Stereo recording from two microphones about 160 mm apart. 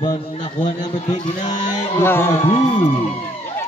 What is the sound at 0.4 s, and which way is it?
A man's voice, 50° left (ahead or behind).